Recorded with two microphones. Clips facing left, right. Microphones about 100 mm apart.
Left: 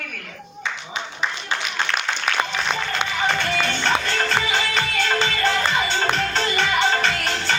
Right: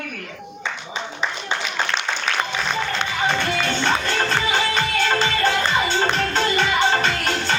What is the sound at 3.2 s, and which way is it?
Music, 20° right (ahead or behind).